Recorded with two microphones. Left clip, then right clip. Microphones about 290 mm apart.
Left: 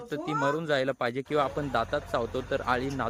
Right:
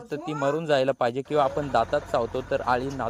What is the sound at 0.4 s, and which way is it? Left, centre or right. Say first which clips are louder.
Speech: right 6 dB; centre.